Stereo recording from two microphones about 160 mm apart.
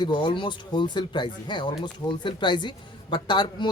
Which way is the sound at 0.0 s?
30° left (ahead or behind).